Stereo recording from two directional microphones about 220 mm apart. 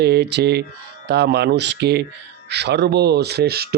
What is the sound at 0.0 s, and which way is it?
Mantra, 50° right (ahead or behind).